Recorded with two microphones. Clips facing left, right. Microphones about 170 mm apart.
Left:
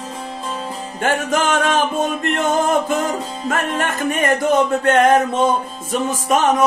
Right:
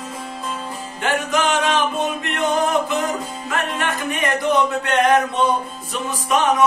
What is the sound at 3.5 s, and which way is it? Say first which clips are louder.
Speech: left 2 dB; 45° left (ahead or behind).